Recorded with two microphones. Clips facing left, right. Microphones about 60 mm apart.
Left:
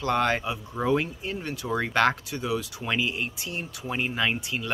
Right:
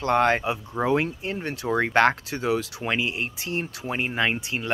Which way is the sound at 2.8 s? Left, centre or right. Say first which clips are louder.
Left 1 dB; right.